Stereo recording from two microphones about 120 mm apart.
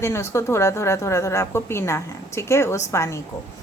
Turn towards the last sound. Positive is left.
turn(degrees=25)  # may be behind; listen again after turning